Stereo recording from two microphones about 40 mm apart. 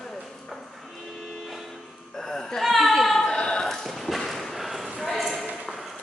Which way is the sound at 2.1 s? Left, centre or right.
Centre.